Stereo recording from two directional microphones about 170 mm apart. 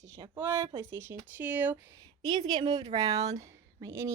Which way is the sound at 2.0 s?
25° right (ahead or behind).